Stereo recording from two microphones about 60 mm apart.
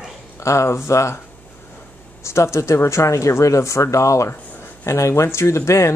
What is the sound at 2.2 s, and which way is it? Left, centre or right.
Speech, left.